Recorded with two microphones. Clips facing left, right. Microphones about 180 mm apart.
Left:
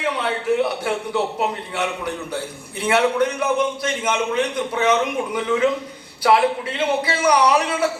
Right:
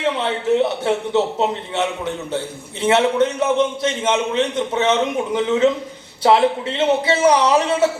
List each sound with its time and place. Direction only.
0.0 s a man's voice: 25° right (ahead or behind)